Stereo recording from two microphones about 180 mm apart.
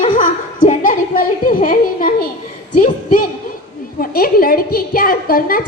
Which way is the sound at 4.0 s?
55° left (ahead or behind).